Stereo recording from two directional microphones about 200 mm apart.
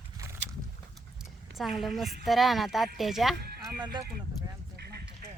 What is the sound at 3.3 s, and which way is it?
Horse, 50° right (ahead or behind).